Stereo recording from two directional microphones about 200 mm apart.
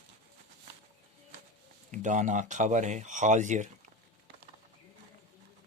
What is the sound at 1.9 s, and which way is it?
Speech, 35° right (ahead or behind).